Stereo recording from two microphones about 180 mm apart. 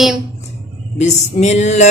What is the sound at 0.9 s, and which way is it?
Music, 40° left (ahead or behind).